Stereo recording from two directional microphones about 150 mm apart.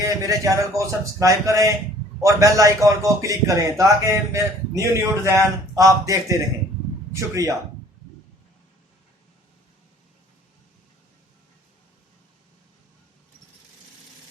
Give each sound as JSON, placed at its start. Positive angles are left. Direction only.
{"t": 0.0, "sound": "a man's voice", "side_deg": -20}